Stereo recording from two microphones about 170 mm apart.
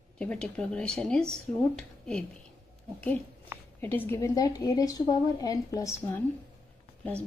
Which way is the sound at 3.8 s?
10° left (ahead or behind).